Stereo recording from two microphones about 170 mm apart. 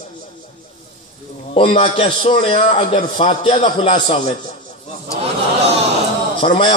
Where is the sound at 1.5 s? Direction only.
35° left (ahead or behind).